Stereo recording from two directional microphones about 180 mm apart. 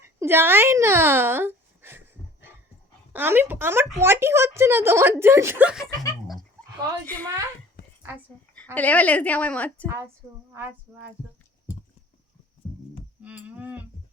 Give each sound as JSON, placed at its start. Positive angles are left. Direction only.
{"t": 0.0, "sound": "speech", "side_deg": -15}
{"t": 2.2, "sound": "a sound", "side_deg": 15}
{"t": 3.1, "sound": "speech", "side_deg": -10}
{"t": 7.0, "sound": "a woman's voice", "side_deg": 10}
{"t": 7.8, "sound": "a sound", "side_deg": 55}
{"t": 8.7, "sound": "a woman's voice", "side_deg": 10}
{"t": 13.2, "sound": "speech", "side_deg": -10}